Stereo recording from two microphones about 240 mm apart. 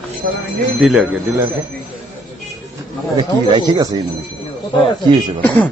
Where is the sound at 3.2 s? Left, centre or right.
Centre.